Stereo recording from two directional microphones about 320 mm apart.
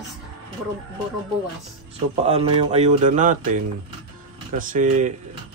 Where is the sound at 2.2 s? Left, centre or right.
Centre.